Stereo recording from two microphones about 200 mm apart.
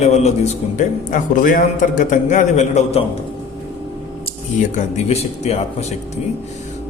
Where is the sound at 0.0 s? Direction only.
35° left (ahead or behind).